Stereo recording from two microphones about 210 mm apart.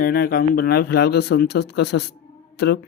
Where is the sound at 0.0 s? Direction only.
45° left (ahead or behind).